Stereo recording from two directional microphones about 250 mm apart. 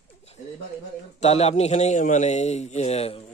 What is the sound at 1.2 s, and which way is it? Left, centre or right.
A man's voice, left.